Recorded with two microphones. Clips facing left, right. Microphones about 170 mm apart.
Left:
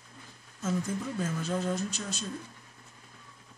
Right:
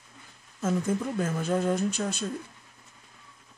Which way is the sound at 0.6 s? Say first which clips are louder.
Right 5 dB; 55° right (ahead or behind).